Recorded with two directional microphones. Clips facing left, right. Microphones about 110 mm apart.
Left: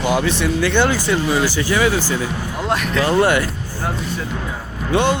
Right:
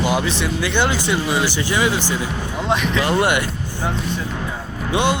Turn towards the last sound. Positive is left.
turn(degrees=-15)  # may be behind; listen again after turning